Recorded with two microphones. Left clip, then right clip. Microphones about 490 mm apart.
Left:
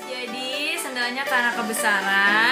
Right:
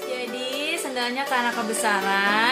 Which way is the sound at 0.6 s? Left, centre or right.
Centre.